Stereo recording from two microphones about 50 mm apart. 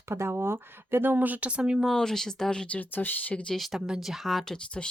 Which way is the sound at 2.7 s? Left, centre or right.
Left.